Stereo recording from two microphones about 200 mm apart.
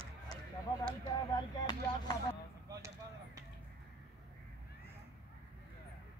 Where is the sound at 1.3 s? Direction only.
20° left (ahead or behind).